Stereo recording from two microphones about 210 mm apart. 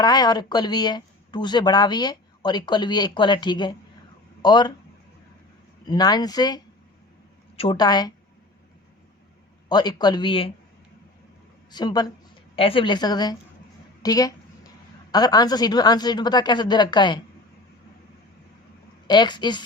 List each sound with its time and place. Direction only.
0.0 s speech: 20° left (ahead or behind)
5.8 s speech: 20° left (ahead or behind)
9.6 s speech: 20° left (ahead or behind)
11.7 s speech: 20° left (ahead or behind)
14.0 s a sound: 15° left (ahead or behind)
15.1 s speech: 20° left (ahead or behind)
19.0 s speech: 20° left (ahead or behind)